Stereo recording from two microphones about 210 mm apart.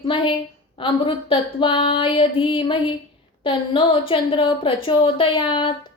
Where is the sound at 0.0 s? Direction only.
25° left (ahead or behind).